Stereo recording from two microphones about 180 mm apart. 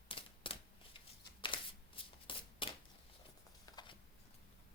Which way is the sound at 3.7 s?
20° left (ahead or behind).